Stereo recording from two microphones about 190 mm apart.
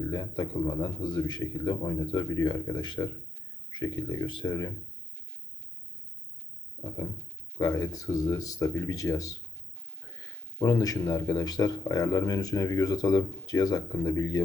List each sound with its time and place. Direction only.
0.1 s speech: 20° left (ahead or behind)
6.8 s a sound: 5° left (ahead or behind)
7.6 s speech: 20° left (ahead or behind)